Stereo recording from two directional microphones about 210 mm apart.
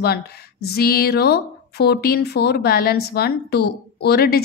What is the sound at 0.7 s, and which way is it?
A woman's voice, 50° left (ahead or behind).